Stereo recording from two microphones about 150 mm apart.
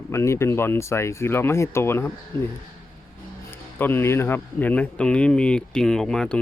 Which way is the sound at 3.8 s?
15° left (ahead or behind).